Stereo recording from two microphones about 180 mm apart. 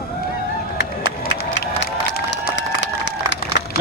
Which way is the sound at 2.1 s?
65° left (ahead or behind).